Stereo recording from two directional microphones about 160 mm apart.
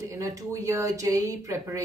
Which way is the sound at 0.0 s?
20° right (ahead or behind).